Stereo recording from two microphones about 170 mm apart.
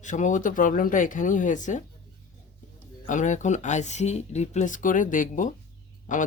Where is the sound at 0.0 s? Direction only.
45° left (ahead or behind).